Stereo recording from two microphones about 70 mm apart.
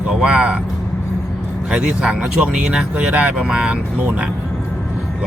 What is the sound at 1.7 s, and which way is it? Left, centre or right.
Speech, centre.